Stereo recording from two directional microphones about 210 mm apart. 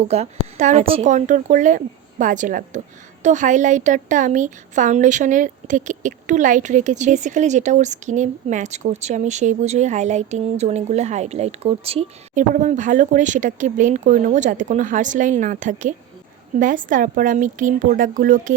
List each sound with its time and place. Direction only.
0.1 s a woman's voice: 30° right (ahead or behind)